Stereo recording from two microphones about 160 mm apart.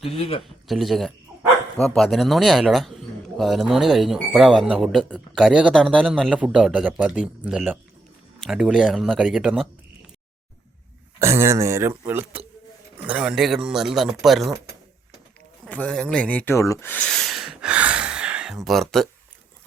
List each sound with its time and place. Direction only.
0.0 s speech: 35° left (ahead or behind)
0.4 s speech: centre (ahead or behind)
11.2 s speech: 15° right (ahead or behind); by 14.5 s centre (ahead or behind)
15.6 s a sound: 5° left (ahead or behind)